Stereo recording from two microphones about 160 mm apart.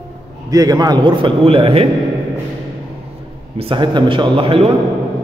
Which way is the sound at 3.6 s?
30° right (ahead or behind).